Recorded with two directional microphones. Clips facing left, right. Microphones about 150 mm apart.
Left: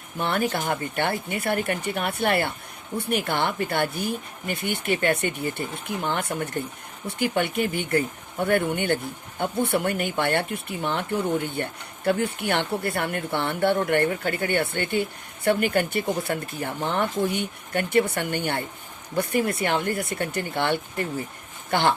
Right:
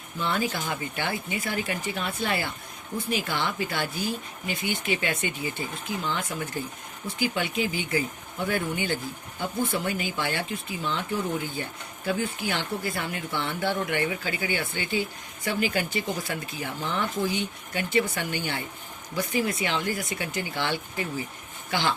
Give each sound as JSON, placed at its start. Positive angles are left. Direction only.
{"t": 0.2, "sound": "speech", "side_deg": 60}